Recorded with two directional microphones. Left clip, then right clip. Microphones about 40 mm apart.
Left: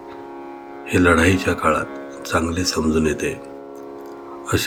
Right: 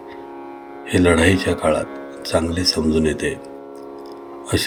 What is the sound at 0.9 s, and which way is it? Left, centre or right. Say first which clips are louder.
Speech: even; centre.